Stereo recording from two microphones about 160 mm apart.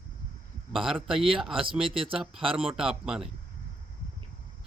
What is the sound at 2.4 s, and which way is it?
Speech, 35° right (ahead or behind).